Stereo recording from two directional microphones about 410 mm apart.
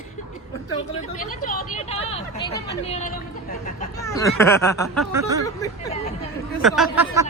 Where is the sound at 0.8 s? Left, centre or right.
Centre.